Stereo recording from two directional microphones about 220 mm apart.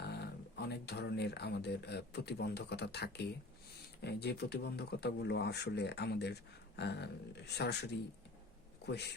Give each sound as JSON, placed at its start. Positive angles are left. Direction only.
{"t": 0.0, "sound": "speech", "side_deg": 50}